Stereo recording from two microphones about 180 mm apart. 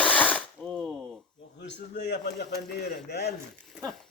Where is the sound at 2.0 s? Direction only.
70° left (ahead or behind).